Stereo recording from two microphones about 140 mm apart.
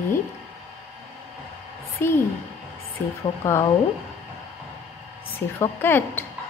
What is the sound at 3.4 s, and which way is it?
Speech, 15° left (ahead or behind).